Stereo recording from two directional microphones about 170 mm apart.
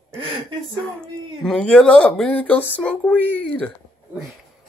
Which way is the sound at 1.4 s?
5° left (ahead or behind).